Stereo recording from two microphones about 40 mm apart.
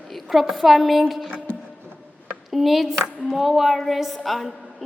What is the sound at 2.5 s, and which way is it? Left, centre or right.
A woman's voice, centre.